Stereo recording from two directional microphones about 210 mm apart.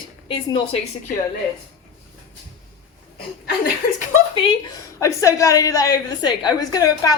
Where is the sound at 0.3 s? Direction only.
25° left (ahead or behind).